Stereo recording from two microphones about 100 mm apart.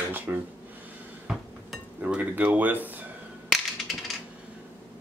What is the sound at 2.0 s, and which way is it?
Speech, 15° right (ahead or behind).